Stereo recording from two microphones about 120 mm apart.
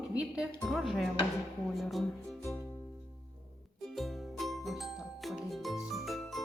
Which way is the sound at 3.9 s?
Centre (ahead or behind).